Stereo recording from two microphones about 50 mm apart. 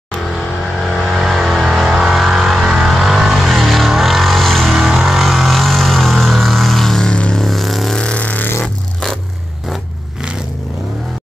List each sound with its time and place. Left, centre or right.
0.3 s vehicle: centre
7.1 s music: centre
7.4 s vehicle: centre
8.0 s vehicle: left
8.6 s music: centre